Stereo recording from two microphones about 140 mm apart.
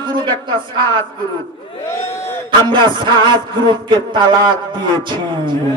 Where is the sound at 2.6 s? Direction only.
35° right (ahead or behind).